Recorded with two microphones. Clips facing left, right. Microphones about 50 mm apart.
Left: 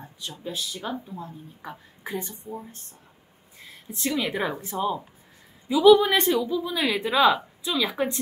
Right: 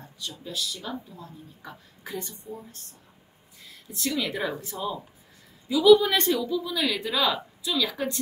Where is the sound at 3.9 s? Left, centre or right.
Left.